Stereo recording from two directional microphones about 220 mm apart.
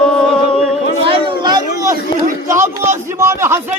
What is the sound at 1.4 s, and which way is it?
Children playing, 20° right (ahead or behind).